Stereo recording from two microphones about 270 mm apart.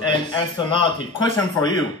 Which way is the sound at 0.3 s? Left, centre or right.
Centre.